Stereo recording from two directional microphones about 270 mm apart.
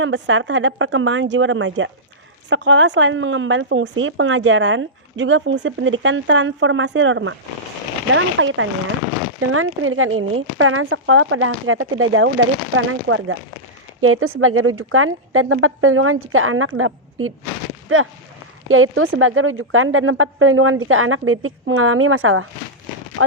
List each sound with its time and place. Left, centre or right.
0.0 s speech: right